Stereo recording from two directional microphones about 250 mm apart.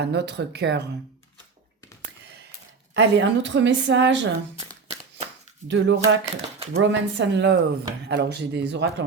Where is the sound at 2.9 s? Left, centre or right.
Right.